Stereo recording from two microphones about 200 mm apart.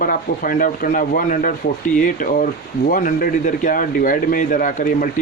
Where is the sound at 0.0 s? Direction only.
45° left (ahead or behind).